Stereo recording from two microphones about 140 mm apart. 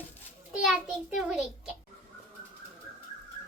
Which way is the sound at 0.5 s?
5° right (ahead or behind).